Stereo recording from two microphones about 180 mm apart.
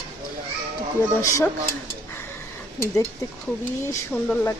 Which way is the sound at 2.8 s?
15° left (ahead or behind).